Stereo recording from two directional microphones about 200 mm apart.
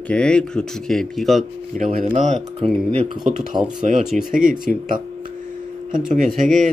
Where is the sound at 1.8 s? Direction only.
40° right (ahead or behind).